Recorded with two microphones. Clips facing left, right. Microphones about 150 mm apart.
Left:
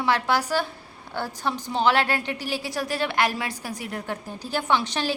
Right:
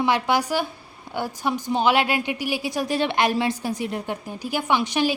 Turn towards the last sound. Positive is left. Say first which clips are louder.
# right 3 dB
turn(degrees=-15)  # may be behind; listen again after turning